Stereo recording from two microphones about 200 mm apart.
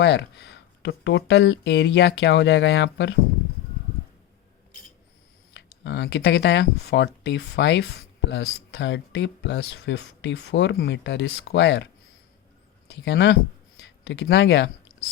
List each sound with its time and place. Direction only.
0.0 s speech: 60° left (ahead or behind)
5.5 s speech: 60° left (ahead or behind)
12.9 s speech: 60° left (ahead or behind)